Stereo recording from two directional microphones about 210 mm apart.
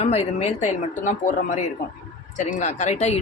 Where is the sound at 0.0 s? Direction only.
30° left (ahead or behind).